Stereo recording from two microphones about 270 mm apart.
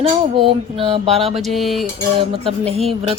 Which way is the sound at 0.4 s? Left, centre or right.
Centre.